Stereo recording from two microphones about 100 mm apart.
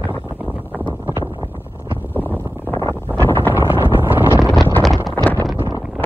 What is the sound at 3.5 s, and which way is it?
Wind noise, 20° right (ahead or behind).